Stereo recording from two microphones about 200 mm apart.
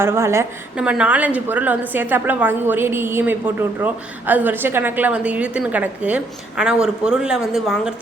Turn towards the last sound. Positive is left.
turn(degrees=0)  # may be behind; listen again after turning